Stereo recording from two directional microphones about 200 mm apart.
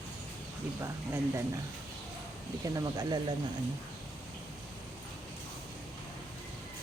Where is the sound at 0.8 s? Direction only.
15° right (ahead or behind).